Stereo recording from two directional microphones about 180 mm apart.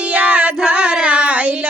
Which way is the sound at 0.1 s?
10° right (ahead or behind).